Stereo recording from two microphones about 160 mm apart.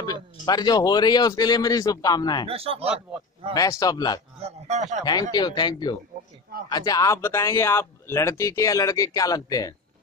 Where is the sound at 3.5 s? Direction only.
20° left (ahead or behind).